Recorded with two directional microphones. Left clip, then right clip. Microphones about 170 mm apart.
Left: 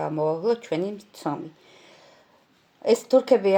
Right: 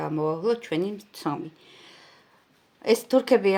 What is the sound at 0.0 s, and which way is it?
Speech, 20° right (ahead or behind).